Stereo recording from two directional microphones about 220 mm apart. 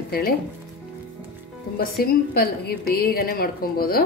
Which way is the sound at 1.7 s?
45° left (ahead or behind).